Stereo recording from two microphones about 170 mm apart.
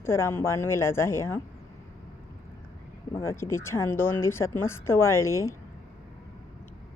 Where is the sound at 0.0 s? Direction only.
15° left (ahead or behind).